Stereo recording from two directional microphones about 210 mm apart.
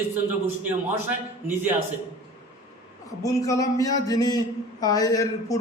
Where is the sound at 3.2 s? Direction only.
15° left (ahead or behind).